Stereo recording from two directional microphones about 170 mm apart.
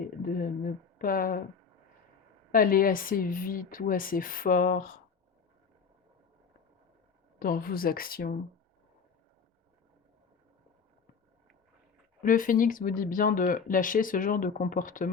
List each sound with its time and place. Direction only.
0.2 s speech: 55° left (ahead or behind)
2.5 s speech: 55° left (ahead or behind)
7.3 s speech: 60° left (ahead or behind)
12.2 s speech: 50° left (ahead or behind)